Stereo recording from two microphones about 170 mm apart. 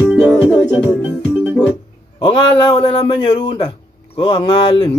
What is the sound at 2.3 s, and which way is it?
Speech, 30° left (ahead or behind).